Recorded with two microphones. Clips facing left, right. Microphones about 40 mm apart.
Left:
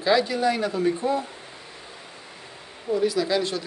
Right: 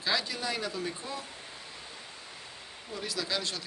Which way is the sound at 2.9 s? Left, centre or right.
Centre.